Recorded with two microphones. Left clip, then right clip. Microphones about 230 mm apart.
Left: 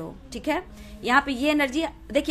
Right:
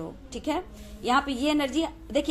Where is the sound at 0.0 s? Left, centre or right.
Left.